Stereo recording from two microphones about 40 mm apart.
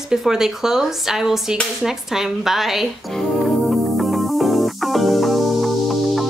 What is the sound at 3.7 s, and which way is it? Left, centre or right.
Music, centre.